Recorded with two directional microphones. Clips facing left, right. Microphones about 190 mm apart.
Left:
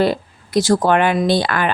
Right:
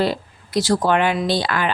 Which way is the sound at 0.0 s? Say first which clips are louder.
Left 4 dB; 50° left (ahead or behind).